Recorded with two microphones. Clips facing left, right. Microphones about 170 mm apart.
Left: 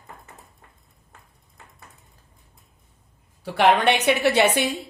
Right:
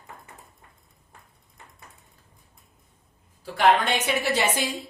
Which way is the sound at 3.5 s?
70° left (ahead or behind).